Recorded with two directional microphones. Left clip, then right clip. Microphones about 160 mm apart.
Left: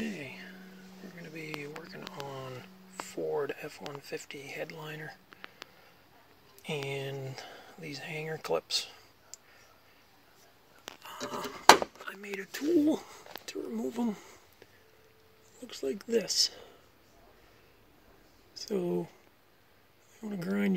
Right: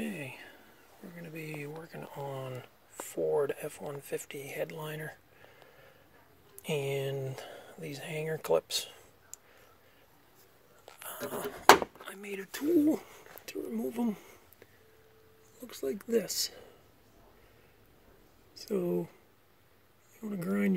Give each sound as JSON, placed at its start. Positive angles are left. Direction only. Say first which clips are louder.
{"t": 0.0, "sound": "a sound", "louder": "even", "side_deg": -5}
{"t": 4.0, "sound": "speech", "louder": "right 2 dB", "side_deg": -20}
{"t": 6.6, "sound": "speech", "louder": "right 3 dB", "side_deg": -25}
{"t": 11.4, "sound": "speech", "louder": "left 1 dB", "side_deg": -15}
{"t": 15.6, "sound": "speech", "louder": "left 1 dB", "side_deg": -10}
{"t": 18.6, "sound": "speech", "louder": "even", "side_deg": -5}
{"t": 20.2, "sound": "speech", "louder": "even", "side_deg": -10}